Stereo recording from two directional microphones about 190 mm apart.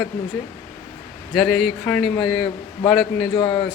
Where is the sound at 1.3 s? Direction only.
Centre (ahead or behind).